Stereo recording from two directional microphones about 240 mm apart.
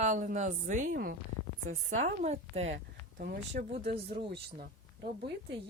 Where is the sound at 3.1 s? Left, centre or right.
Right.